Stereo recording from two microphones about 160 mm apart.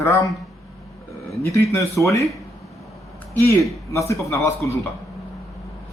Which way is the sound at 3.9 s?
20° left (ahead or behind).